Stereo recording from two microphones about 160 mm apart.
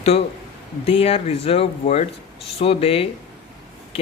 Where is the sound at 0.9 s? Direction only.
35° left (ahead or behind).